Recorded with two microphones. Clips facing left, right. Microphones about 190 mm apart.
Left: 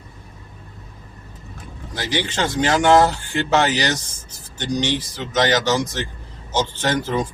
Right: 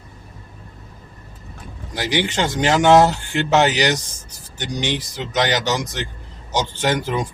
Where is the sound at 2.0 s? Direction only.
15° right (ahead or behind).